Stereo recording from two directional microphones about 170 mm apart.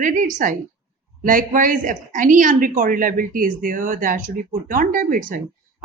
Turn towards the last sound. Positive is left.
turn(degrees=-55)  # may be behind; listen again after turning